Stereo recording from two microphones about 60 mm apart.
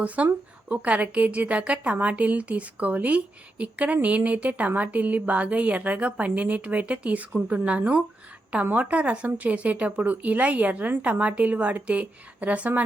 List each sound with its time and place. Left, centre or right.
0.2 s speech: right